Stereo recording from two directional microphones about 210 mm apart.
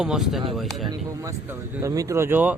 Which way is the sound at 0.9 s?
15° right (ahead or behind).